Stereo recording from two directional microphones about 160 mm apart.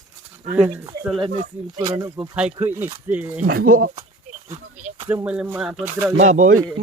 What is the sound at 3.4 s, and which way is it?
Speech, 65° right (ahead or behind).